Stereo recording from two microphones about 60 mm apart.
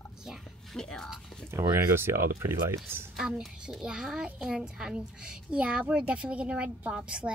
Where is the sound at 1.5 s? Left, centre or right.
Right.